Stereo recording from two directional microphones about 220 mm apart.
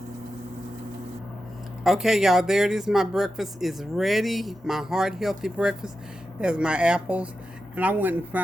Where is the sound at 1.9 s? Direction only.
Centre (ahead or behind).